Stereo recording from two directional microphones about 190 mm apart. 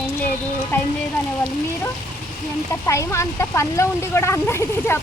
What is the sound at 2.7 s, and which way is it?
Speech, 15° left (ahead or behind).